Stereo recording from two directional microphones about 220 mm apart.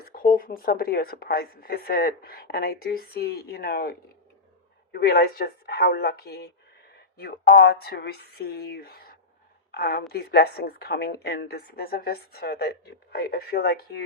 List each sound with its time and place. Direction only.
0.0 s a woman's voice: 40° left (ahead or behind)